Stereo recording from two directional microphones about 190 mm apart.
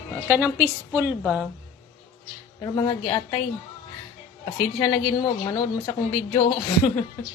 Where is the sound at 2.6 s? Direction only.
25° left (ahead or behind).